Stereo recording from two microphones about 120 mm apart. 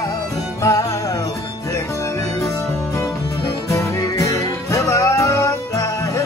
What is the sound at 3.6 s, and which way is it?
Music, 25° left (ahead or behind).